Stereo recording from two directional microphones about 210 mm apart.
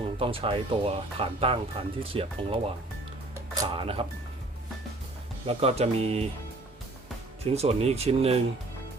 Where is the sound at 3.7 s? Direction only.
25° right (ahead or behind).